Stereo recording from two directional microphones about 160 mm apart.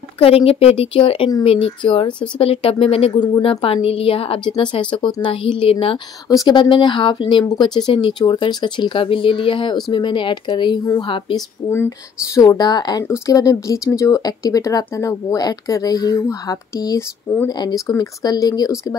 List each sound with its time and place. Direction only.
0.2 s speech: 35° left (ahead or behind)
6.2 s speech: 25° left (ahead or behind)